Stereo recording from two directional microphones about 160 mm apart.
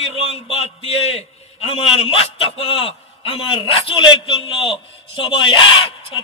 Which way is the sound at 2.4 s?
35° left (ahead or behind).